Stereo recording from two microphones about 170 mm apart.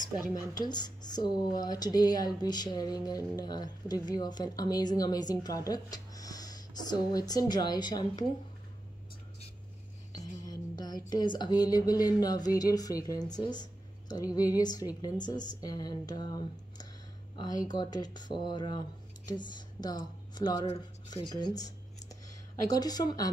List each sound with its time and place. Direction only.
0.3 s speech: 20° left (ahead or behind)
10.5 s speech: 25° left (ahead or behind)